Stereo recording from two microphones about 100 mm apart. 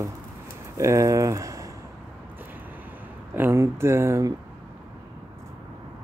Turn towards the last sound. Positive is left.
turn(degrees=-30)  # may be behind; listen again after turning